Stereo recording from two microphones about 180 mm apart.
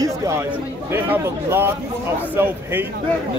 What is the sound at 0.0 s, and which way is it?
Chatter, 15° right (ahead or behind).